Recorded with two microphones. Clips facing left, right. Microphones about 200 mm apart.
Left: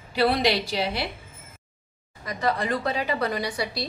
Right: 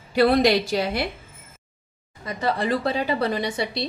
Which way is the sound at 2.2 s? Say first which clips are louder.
Right 2 dB; 30° right (ahead or behind).